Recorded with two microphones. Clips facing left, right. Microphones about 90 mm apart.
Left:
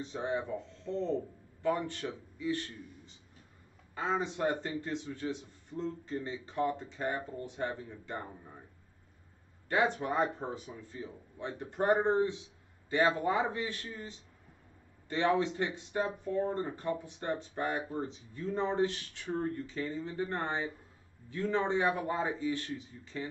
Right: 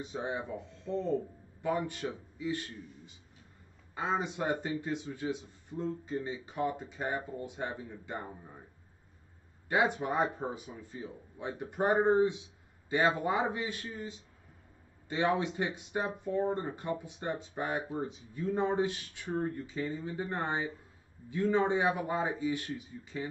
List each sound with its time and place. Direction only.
0.0 s a man's voice: 15° right (ahead or behind)
9.7 s a man's voice: 15° right (ahead or behind)
15.0 s a man's voice: 15° right (ahead or behind)